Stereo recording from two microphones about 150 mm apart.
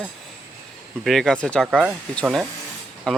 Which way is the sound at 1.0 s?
5° left (ahead or behind).